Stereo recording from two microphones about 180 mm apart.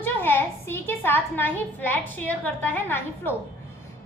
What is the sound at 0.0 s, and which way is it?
A woman's voice, 15° left (ahead or behind).